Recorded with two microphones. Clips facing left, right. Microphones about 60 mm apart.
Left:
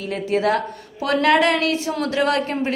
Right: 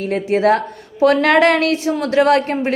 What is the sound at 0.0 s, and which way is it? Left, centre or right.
A woman's voice, right.